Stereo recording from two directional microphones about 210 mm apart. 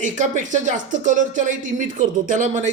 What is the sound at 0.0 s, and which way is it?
Speech, 35° right (ahead or behind).